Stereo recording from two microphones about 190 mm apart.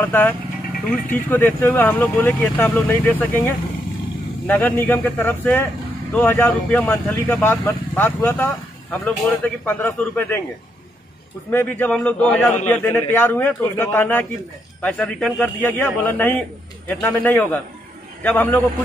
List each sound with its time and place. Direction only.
0.0 s a man's voice: 10° left (ahead or behind)
11.5 s a man's voice: 10° left (ahead or behind)